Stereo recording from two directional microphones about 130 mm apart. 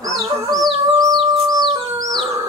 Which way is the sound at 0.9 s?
30° right (ahead or behind).